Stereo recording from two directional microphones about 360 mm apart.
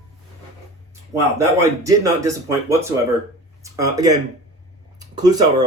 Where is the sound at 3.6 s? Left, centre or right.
Centre.